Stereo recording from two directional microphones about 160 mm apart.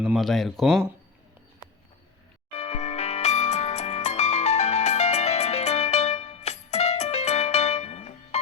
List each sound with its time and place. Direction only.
0.0 s speech: centre (ahead or behind)
2.6 s music: 45° left (ahead or behind)